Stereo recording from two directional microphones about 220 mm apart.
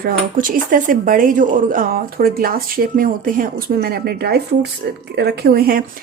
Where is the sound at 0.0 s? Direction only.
40° right (ahead or behind).